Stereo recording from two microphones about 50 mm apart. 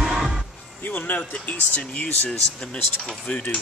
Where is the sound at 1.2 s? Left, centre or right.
Left.